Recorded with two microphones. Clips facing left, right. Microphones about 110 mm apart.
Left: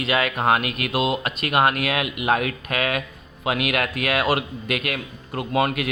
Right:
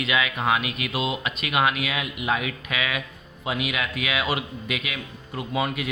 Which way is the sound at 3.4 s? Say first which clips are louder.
Left 4 dB; 65° left (ahead or behind).